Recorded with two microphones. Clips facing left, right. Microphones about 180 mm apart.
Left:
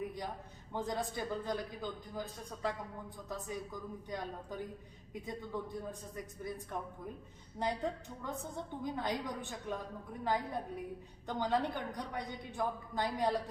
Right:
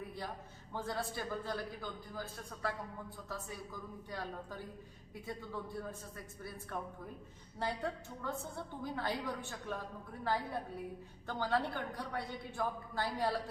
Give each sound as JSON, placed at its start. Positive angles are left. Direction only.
{"t": 0.7, "sound": "a woman's voice", "side_deg": 20}